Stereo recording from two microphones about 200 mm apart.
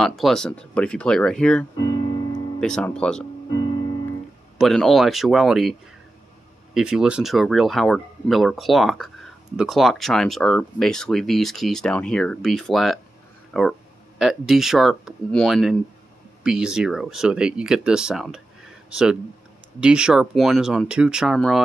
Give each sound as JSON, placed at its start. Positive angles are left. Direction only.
{"t": 0.0, "sound": "speech", "side_deg": 0}
{"t": 1.9, "sound": "keyboard", "side_deg": 20}
{"t": 2.6, "sound": "speech", "side_deg": 5}
{"t": 4.6, "sound": "speech", "side_deg": 0}